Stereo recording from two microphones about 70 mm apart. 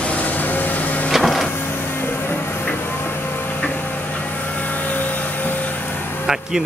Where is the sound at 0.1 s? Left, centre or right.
Left.